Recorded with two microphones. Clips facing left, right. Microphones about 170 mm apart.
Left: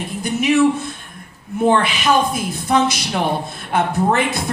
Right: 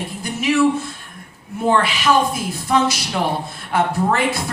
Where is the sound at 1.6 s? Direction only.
20° left (ahead or behind).